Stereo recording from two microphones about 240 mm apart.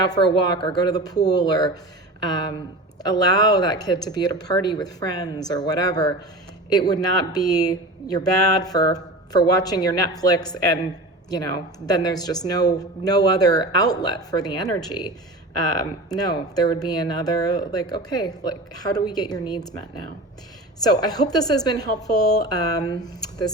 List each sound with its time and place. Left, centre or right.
0.4 s speech: centre
11.9 s speech: centre